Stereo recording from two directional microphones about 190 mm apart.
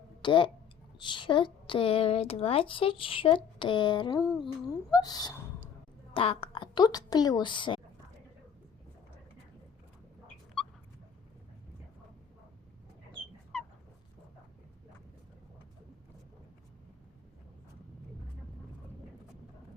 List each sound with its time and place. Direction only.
0.2 s a woman's voice: 25° left (ahead or behind)
4.2 s humming: centre (ahead or behind)
4.7 s a woman's voice: 20° left (ahead or behind)